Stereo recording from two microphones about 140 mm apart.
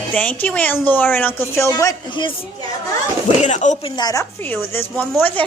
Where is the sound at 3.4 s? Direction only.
60° left (ahead or behind).